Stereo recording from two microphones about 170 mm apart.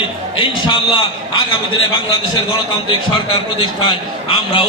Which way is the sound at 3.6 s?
30° left (ahead or behind).